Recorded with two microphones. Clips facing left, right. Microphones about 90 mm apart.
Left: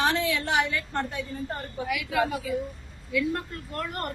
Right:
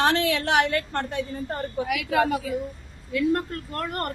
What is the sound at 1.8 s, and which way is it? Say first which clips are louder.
A woman's voice: right 3 dB; 60° right (ahead or behind).